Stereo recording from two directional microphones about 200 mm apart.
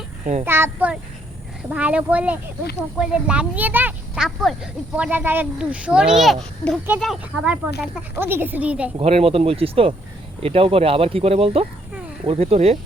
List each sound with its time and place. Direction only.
0.4 s a woman's voice: 10° right (ahead or behind)
9.0 s speech: 30° right (ahead or behind)